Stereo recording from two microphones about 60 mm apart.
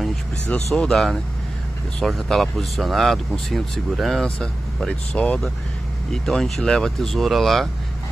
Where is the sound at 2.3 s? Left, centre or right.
Centre.